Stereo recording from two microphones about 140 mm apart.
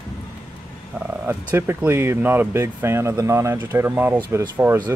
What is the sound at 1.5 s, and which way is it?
Speech, 15° right (ahead or behind).